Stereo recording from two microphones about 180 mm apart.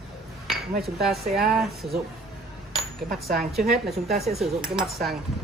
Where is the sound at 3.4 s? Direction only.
Centre (ahead or behind).